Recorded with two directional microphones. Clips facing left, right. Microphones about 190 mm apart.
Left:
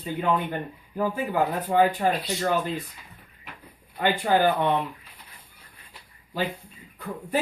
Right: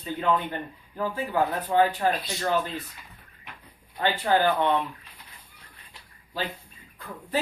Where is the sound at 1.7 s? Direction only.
15° left (ahead or behind).